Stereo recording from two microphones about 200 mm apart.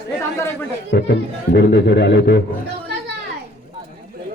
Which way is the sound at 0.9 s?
55° left (ahead or behind).